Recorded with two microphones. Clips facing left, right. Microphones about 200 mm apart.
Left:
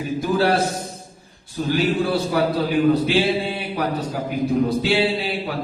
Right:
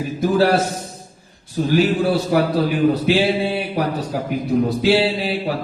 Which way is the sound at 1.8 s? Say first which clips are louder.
Right 1 dB; 40° right (ahead or behind).